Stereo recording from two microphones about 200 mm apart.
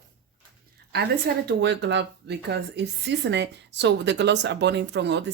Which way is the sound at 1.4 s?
60° right (ahead or behind).